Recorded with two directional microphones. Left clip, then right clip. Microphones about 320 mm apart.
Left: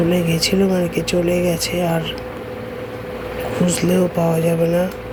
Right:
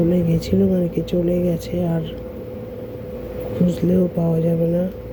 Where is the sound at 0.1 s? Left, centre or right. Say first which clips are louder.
Left 3 dB; centre.